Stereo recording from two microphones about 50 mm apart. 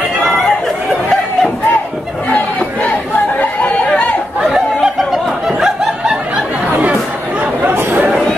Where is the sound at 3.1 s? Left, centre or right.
Left.